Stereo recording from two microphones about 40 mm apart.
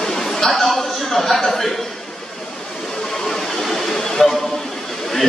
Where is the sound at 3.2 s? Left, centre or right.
Centre.